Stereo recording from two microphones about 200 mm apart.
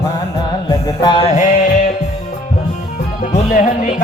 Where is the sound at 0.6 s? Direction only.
20° left (ahead or behind).